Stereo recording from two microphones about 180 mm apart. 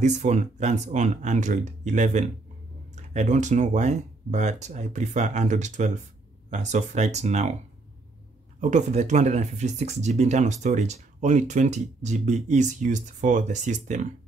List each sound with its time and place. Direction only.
0.0 s speech: 40° right (ahead or behind)
8.5 s speech: 40° right (ahead or behind)